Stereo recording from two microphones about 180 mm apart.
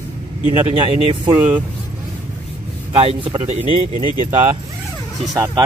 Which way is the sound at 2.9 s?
30° right (ahead or behind).